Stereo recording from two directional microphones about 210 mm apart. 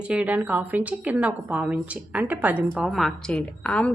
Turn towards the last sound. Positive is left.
turn(degrees=5)  # may be behind; listen again after turning